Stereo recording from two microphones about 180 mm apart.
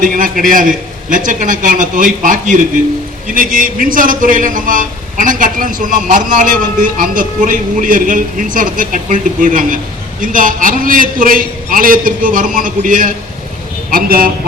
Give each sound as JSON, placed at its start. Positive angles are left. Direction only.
{"t": 0.0, "sound": "a man's voice", "side_deg": -50}